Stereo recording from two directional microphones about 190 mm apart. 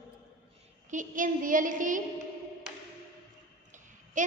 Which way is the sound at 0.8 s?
45° right (ahead or behind).